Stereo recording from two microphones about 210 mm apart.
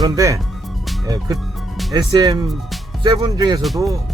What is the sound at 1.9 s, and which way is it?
Speech, 20° right (ahead or behind).